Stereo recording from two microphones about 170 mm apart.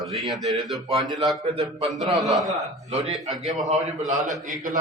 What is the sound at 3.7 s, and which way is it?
Speech, 45° right (ahead or behind).